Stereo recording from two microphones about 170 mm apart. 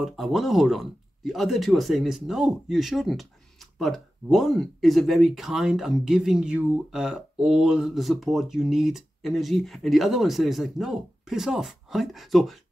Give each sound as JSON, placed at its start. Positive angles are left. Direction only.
{"t": 0.0, "sound": "speech", "side_deg": 0}